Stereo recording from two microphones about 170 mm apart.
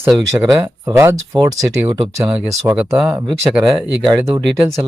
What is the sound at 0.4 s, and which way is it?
Speech, 20° right (ahead or behind).